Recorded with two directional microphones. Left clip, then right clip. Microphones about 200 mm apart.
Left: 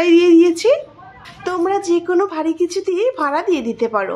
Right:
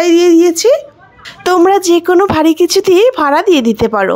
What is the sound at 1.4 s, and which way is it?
A woman's voice, 50° right (ahead or behind).